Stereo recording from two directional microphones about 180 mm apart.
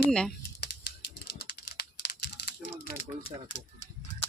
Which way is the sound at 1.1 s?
60° left (ahead or behind).